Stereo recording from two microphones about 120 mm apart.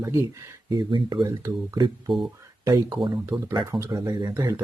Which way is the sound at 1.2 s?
25° right (ahead or behind).